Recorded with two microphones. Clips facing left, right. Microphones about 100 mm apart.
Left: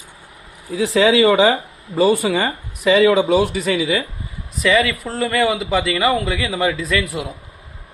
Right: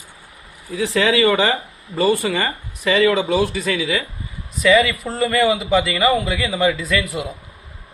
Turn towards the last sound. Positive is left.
turn(degrees=0)  # may be behind; listen again after turning